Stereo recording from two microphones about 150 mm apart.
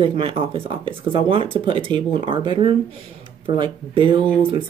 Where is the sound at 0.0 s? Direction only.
35° right (ahead or behind).